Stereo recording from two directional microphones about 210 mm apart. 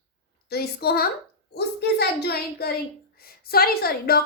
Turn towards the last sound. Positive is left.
turn(degrees=45)  # may be behind; listen again after turning